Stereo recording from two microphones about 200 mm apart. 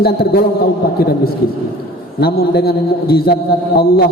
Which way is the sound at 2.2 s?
50° left (ahead or behind).